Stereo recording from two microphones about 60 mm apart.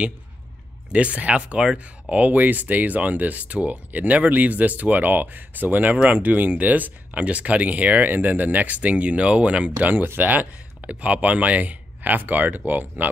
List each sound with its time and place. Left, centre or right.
0.9 s speech: right
2.1 s speech: right